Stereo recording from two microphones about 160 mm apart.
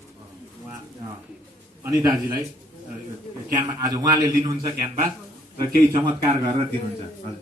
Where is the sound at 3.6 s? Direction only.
25° right (ahead or behind).